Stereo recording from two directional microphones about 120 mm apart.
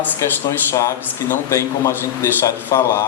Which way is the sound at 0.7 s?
25° left (ahead or behind).